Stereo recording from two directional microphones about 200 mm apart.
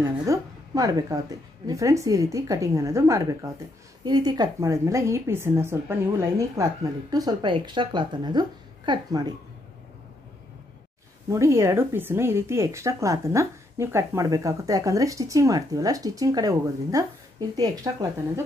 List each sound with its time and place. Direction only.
0.0 s a woman's voice: 15° right (ahead or behind)
11.2 s a woman's voice: 15° right (ahead or behind)